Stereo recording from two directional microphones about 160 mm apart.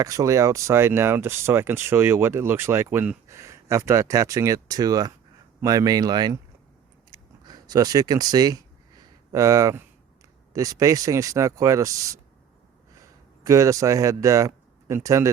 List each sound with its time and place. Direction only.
0.0 s speech: 20° right (ahead or behind)
7.1 s a sound: 25° right (ahead or behind)
10.5 s speech: 20° right (ahead or behind)